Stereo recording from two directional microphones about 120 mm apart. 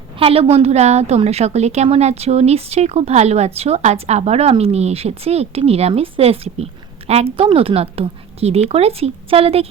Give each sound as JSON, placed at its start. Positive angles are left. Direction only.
{"t": 0.2, "sound": "a woman's voice", "side_deg": -55}